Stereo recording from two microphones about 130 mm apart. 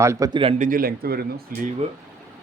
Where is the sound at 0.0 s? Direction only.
20° right (ahead or behind).